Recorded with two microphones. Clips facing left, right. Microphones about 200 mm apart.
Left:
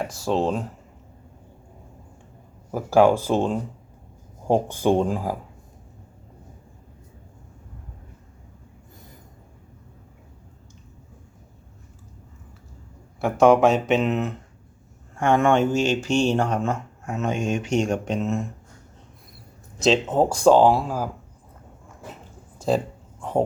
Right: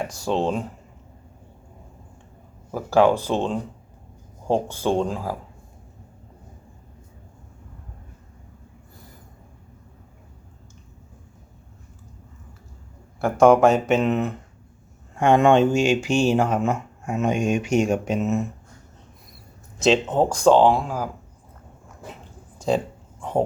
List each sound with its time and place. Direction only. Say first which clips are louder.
0.0 s speech: even; centre (ahead or behind)
2.7 s speech: left 1 dB; 10° left (ahead or behind)
13.2 s speech: right 1 dB; centre (ahead or behind)
15.1 s speech: right 3 dB; 20° right (ahead or behind)
19.8 s speech: even; centre (ahead or behind)
22.5 s a sound: even; centre (ahead or behind)